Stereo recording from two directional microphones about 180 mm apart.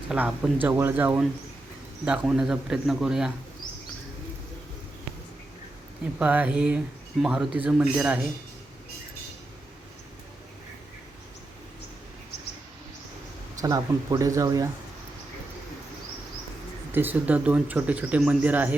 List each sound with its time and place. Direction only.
0.1 s a man's voice: 5° right (ahead or behind)
6.1 s speech: 10° right (ahead or behind)
13.6 s speech: 20° right (ahead or behind)
16.9 s speech: 10° right (ahead or behind)